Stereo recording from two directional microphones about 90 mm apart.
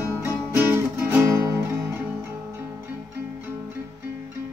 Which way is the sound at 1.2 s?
30° right (ahead or behind).